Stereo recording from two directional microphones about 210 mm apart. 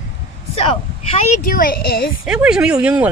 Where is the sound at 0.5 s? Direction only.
25° left (ahead or behind).